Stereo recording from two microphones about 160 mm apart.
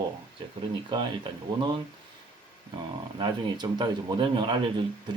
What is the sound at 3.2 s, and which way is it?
Speech, 25° right (ahead or behind).